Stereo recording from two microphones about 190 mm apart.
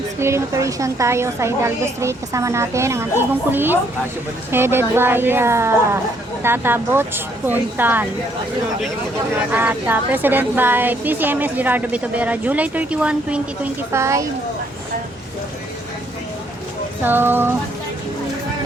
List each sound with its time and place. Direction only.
0.2 s a woman's voice: 15° right (ahead or behind)
9.5 s a woman's voice: 10° right (ahead or behind)
17.0 s a woman's voice: 10° right (ahead or behind)